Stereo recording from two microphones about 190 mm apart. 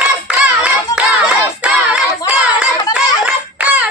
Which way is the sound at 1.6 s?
5° right (ahead or behind).